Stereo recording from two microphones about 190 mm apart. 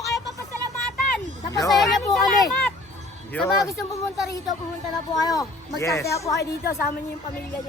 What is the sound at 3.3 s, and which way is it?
Speech, 15° left (ahead or behind).